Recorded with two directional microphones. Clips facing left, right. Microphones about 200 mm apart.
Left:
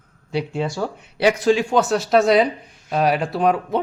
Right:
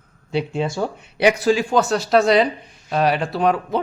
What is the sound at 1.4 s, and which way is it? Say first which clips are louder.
Speech: even; centre (ahead or behind).